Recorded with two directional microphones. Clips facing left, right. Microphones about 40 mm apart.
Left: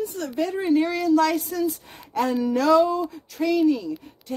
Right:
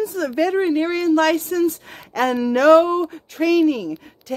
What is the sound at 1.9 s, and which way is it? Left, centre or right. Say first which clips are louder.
Speech: right 4 dB; right.